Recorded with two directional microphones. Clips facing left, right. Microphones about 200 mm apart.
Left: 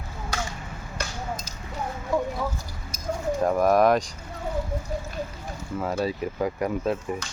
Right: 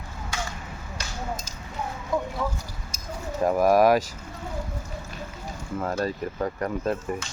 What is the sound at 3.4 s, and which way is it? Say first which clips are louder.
Speech: right 1 dB; 5° right (ahead or behind).